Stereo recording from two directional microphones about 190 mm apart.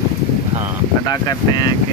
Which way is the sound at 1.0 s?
20° left (ahead or behind).